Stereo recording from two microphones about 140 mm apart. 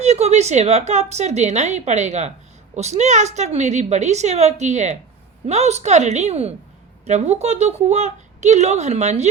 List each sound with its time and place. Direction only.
0.0 s speech: 50° right (ahead or behind)